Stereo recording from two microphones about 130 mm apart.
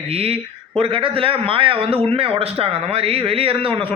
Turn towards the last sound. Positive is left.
turn(degrees=-45)  # may be behind; listen again after turning